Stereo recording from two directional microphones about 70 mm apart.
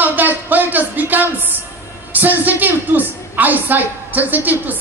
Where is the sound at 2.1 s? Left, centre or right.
Right.